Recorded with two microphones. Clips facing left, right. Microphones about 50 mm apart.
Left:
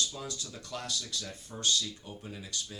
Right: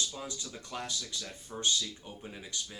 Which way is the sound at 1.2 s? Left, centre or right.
Centre.